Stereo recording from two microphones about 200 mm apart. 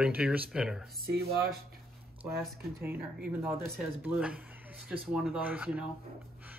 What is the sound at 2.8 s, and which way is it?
Speech, 10° right (ahead or behind).